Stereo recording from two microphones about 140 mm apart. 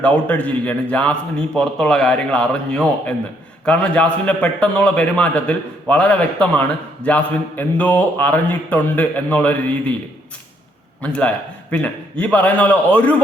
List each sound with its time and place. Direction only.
0.0 s a man's voice: 10° left (ahead or behind)
11.0 s a man's voice: 10° left (ahead or behind)